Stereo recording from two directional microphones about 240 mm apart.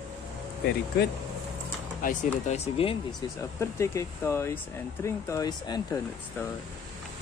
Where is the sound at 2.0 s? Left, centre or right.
Left; by 6.5 s centre.